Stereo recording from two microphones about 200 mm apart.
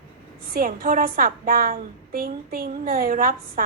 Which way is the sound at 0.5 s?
45° right (ahead or behind).